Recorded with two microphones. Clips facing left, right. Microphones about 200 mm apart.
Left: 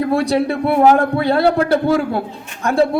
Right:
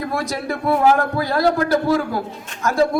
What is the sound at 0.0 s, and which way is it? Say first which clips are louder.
A man's voice: left 8 dB; 30° left (ahead or behind).